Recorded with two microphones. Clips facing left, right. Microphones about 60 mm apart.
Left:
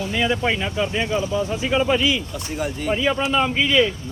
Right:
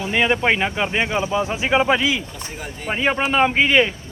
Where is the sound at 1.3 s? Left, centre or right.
Right.